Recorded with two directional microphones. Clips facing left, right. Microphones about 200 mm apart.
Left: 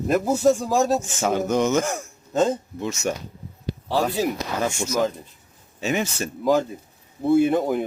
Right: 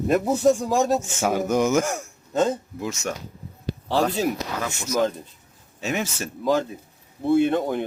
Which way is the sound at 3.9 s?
5° left (ahead or behind).